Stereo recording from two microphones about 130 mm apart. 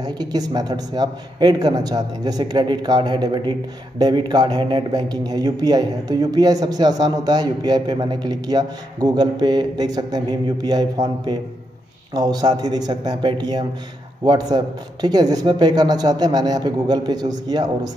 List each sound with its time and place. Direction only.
0.0 s speech: 30° right (ahead or behind)